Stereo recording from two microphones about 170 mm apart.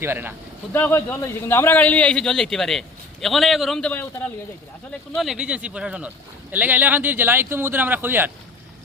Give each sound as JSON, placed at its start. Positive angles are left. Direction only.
{"t": 0.0, "sound": "speech", "side_deg": -15}
{"t": 0.7, "sound": "a man's voice", "side_deg": 15}
{"t": 5.1, "sound": "speech", "side_deg": 0}